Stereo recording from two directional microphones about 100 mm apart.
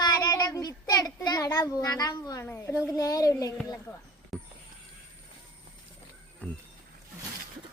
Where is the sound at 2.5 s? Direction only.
25° left (ahead or behind).